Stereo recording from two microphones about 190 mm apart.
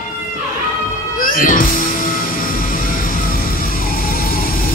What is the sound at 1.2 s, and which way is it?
Music, 45° left (ahead or behind).